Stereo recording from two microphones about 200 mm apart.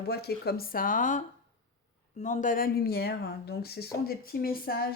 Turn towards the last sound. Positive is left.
turn(degrees=50)  # may be behind; listen again after turning